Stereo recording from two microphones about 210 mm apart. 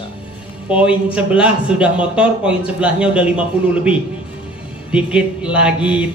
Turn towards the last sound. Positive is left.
turn(degrees=-5)  # may be behind; listen again after turning